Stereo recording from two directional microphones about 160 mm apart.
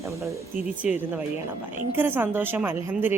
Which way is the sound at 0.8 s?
5° right (ahead or behind).